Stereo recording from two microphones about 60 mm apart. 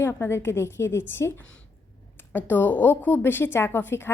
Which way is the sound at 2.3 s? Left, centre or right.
Left.